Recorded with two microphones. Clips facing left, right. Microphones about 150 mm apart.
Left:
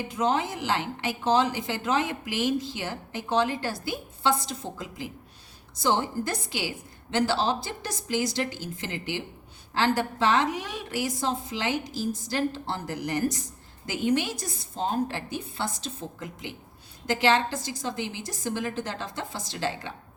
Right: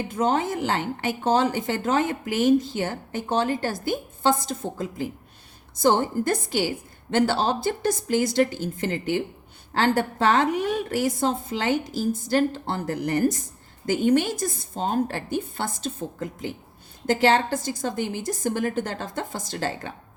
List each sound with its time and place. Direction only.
0.1 s a woman's voice: 50° right (ahead or behind)